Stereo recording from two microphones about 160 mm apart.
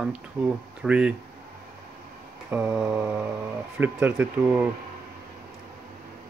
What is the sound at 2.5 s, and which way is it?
Speech, 10° right (ahead or behind).